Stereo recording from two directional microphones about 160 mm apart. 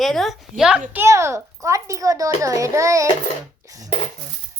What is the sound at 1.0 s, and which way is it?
A child's voice, 15° right (ahead or behind).